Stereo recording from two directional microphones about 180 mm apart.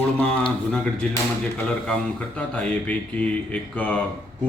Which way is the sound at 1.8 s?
5° left (ahead or behind).